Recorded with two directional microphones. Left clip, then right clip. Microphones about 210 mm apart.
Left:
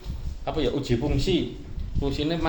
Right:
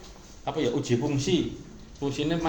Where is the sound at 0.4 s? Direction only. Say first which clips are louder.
Left 1 dB; 30° left (ahead or behind).